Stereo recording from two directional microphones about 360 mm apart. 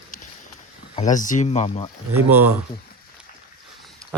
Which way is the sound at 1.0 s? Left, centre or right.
Left.